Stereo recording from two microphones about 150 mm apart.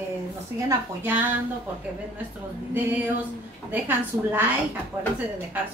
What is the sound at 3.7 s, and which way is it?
Speech, 10° right (ahead or behind).